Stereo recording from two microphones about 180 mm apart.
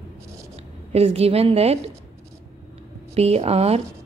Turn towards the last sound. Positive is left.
turn(degrees=-35)  # may be behind; listen again after turning